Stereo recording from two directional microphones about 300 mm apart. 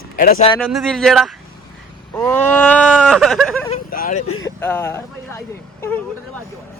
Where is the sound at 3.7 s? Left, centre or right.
Left.